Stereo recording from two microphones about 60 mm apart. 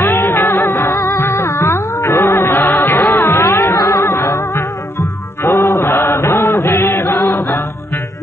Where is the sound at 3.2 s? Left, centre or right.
Left.